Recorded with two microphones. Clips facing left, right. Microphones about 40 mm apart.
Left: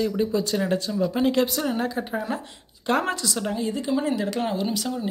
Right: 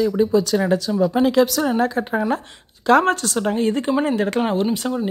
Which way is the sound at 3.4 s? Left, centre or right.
Right.